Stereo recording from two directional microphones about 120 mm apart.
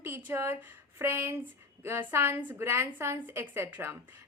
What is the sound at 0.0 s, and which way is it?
A woman's voice, 20° right (ahead or behind).